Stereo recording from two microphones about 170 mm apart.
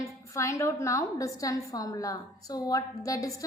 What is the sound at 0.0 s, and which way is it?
A woman's voice, 15° left (ahead or behind).